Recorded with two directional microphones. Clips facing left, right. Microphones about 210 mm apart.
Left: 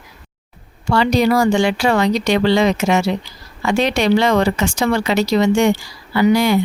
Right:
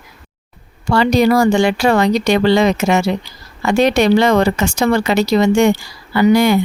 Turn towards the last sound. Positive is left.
turn(degrees=-50)  # may be behind; listen again after turning